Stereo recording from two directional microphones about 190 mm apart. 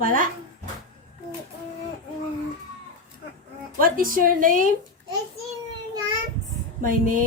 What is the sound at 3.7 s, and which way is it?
Speech, 45° right (ahead or behind).